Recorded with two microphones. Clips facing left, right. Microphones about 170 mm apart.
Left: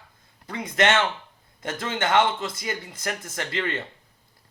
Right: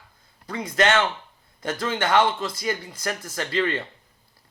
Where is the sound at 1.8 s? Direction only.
25° left (ahead or behind).